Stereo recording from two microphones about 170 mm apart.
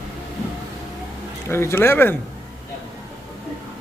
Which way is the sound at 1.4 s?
15° left (ahead or behind).